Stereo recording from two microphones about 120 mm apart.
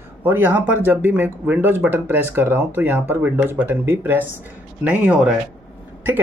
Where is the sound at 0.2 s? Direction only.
15° right (ahead or behind).